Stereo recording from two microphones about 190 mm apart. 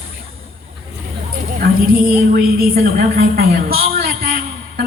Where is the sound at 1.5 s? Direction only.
50° right (ahead or behind).